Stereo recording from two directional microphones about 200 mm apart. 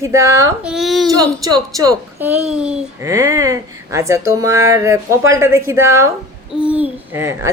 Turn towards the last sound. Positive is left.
turn(degrees=-10)  # may be behind; listen again after turning